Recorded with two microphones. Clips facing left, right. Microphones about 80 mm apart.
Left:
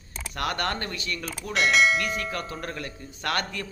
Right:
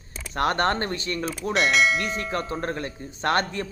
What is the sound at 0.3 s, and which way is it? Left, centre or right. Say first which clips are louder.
Speech: right 6 dB; right.